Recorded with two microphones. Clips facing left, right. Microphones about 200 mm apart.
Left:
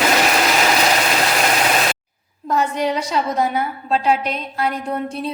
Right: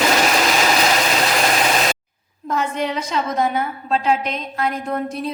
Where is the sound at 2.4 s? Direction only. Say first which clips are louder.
Left 3 dB; 35° left (ahead or behind).